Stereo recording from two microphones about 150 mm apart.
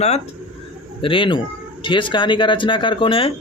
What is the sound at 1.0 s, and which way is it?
Speech, 35° left (ahead or behind).